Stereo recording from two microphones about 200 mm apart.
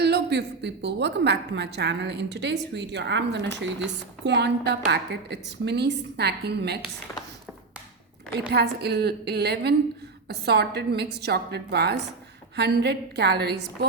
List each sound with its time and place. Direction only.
0.0 s a woman's voice: 55° right (ahead or behind)
8.3 s a woman's voice: 55° right (ahead or behind)